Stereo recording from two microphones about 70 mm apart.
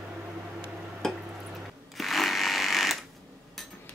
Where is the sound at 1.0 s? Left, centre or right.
Centre.